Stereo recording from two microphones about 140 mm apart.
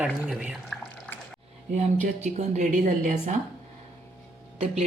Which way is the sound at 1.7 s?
55° right (ahead or behind).